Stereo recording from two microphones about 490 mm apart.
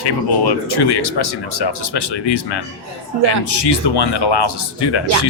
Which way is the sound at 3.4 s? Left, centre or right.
Left.